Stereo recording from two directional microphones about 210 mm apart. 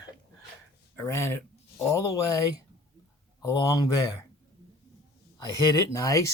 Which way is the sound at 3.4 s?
15° left (ahead or behind).